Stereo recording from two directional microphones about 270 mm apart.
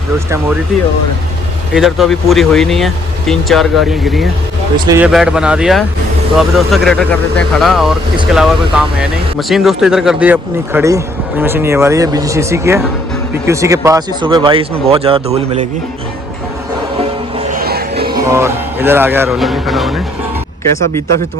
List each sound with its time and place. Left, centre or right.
1.7 s speech: centre; by 15.6 s right
17.3 s music: right
18.1 s speech: centre